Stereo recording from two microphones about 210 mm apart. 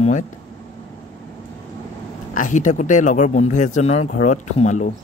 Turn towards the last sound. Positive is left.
turn(degrees=35)  # may be behind; listen again after turning